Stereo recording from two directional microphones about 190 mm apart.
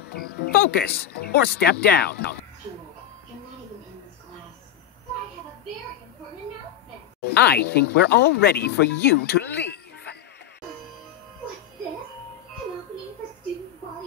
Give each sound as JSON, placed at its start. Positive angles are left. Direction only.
{"t": 0.0, "sound": "speech", "side_deg": 55}
{"t": 7.3, "sound": "speech", "side_deg": 60}